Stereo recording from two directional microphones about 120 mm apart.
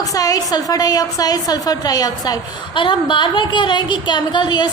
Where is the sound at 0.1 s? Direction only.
30° left (ahead or behind).